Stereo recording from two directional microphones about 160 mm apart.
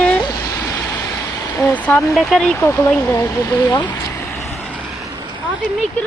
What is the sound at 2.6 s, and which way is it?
Speech, 15° left (ahead or behind).